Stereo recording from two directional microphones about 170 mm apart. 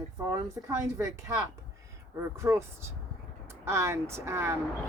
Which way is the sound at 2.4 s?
15° right (ahead or behind).